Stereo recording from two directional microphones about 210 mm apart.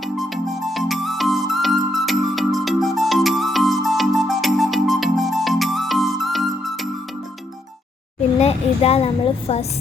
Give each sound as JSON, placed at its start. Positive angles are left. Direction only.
{"t": 0.0, "sound": "music", "side_deg": 0}
{"t": 8.4, "sound": "a woman's voice", "side_deg": 30}